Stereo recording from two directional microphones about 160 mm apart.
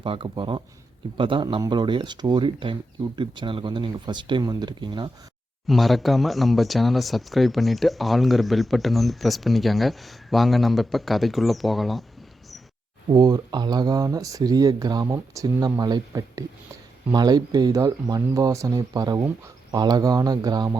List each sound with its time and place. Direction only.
0.0 s speech: 35° right (ahead or behind)
5.6 s speech: centre (ahead or behind)
13.1 s speech: 25° right (ahead or behind)